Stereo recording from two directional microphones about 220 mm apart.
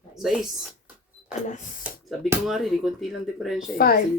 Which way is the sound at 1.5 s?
35° left (ahead or behind).